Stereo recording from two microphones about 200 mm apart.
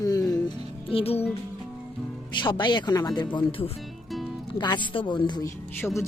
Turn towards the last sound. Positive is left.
turn(degrees=15)  # may be behind; listen again after turning